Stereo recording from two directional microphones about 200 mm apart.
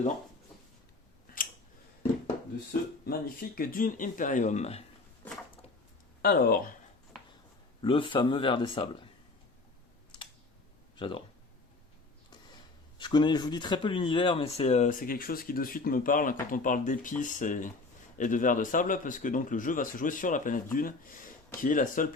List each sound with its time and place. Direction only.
3.1 s speech: 45° left (ahead or behind)
6.2 s speech: 50° left (ahead or behind)
7.8 s speech: 25° left (ahead or behind)
10.9 s speech: 25° left (ahead or behind)
13.0 s speech: 20° left (ahead or behind); by 22.1 s 40° left (ahead or behind)